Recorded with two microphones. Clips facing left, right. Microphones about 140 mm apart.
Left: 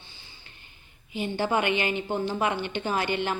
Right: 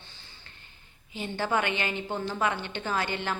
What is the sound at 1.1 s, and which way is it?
A woman's voice, 15° left (ahead or behind).